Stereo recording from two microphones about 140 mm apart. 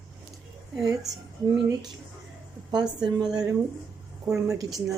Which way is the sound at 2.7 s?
5° right (ahead or behind).